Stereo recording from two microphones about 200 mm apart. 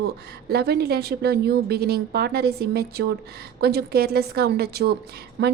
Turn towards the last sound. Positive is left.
turn(degrees=-60)  # may be behind; listen again after turning